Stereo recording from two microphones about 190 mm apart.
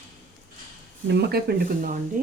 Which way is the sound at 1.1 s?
55° right (ahead or behind).